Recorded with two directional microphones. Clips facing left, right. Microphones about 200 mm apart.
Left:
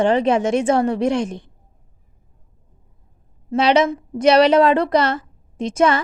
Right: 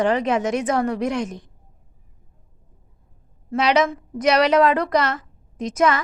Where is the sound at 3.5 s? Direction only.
30° left (ahead or behind).